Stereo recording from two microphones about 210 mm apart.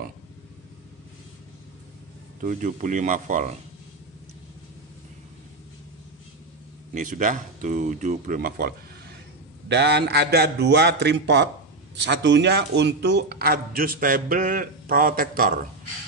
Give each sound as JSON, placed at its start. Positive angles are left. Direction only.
{"t": 2.4, "sound": "speech", "side_deg": -40}
{"t": 6.9, "sound": "speech", "side_deg": -40}